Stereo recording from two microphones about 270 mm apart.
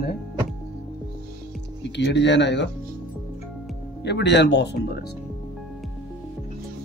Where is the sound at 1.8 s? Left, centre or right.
Left.